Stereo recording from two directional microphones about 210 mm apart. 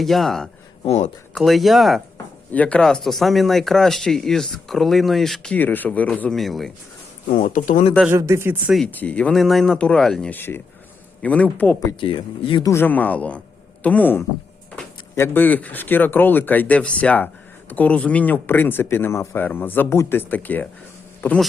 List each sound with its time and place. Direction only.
0.0 s speech: centre (ahead or behind)
0.9 s speech: 30° left (ahead or behind)
1.3 s speech: centre (ahead or behind)
7.3 s speech: 40° left (ahead or behind)
8.0 s speech: 10° right (ahead or behind); by 11.9 s 10° left (ahead or behind)
11.9 s speech: 25° left (ahead or behind)
12.7 s speech: 10° left (ahead or behind)